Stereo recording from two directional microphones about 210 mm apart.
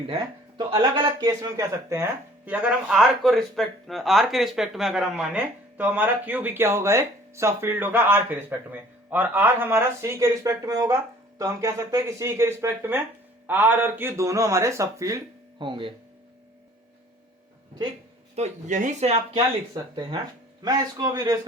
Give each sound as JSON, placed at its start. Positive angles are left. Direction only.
{"t": 0.1, "sound": "speech", "side_deg": -20}
{"t": 18.3, "sound": "speech", "side_deg": -35}